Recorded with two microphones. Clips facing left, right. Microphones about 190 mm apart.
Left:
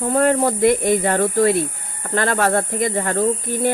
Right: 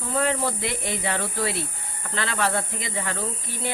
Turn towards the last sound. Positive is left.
turn(degrees=50)  # may be behind; listen again after turning